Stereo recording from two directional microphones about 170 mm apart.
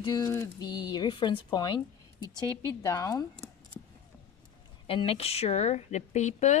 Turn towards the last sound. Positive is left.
turn(degrees=40)  # may be behind; listen again after turning